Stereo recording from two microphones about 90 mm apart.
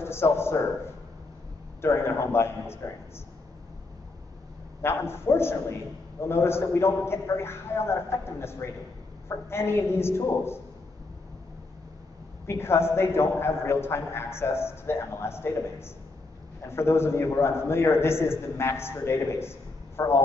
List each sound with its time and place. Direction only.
0.0 s a man's voice: 30° left (ahead or behind)
1.8 s a man's voice: 30° left (ahead or behind)
4.8 s a man's voice: 30° left (ahead or behind)
12.4 s a man's voice: 30° left (ahead or behind)